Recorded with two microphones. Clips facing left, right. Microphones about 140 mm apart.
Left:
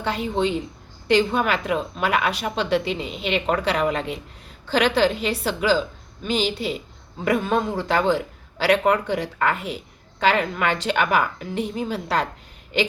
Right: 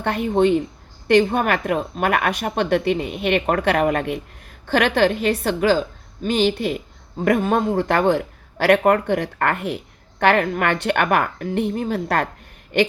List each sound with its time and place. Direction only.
0.0 s a woman's voice: 55° right (ahead or behind)